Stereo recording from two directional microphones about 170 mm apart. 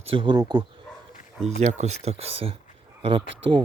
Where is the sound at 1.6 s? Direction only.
40° right (ahead or behind).